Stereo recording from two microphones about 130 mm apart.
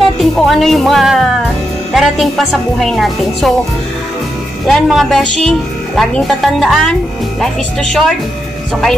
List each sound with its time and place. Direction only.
0.2 s a woman's voice: centre (ahead or behind)
4.6 s a woman's voice: centre (ahead or behind)